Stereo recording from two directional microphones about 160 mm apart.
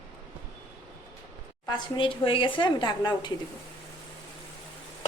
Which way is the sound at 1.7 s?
30° left (ahead or behind).